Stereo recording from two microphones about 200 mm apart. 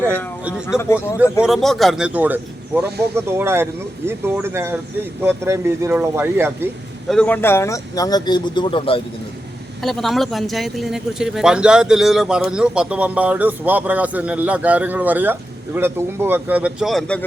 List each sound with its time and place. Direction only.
0.0 s a man's voice: 10° left (ahead or behind)
1.2 s a man's voice: centre (ahead or behind)
7.1 s speech: 5° left (ahead or behind); by 9.0 s 25° left (ahead or behind)
9.8 s speech: centre (ahead or behind)